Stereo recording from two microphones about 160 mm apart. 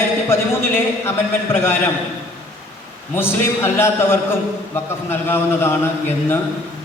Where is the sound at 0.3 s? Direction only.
15° left (ahead or behind).